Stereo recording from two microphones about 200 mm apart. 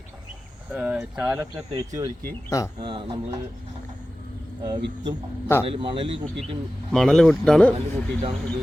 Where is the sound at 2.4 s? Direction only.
15° left (ahead or behind).